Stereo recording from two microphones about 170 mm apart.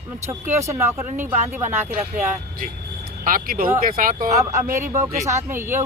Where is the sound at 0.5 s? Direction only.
15° right (ahead or behind).